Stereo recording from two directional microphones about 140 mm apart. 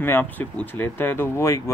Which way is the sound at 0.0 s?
15° left (ahead or behind).